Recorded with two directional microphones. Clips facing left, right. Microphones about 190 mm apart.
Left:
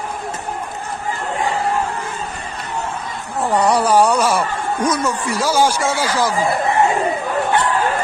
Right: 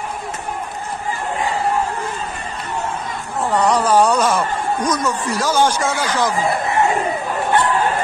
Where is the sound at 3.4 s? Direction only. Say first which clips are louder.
Left 1 dB; 10° left (ahead or behind).